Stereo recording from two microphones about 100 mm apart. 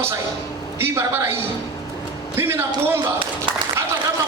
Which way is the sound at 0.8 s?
25° right (ahead or behind).